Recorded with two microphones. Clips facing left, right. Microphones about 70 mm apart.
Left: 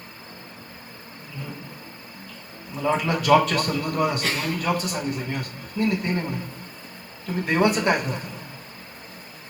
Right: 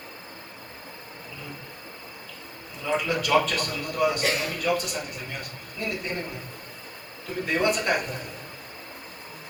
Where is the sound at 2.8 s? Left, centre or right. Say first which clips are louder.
Left 4 dB; left.